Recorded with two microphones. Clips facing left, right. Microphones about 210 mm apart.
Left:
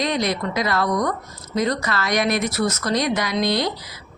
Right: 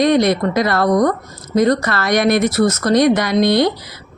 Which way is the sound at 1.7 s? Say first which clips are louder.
Right 6 dB; 65° right (ahead or behind).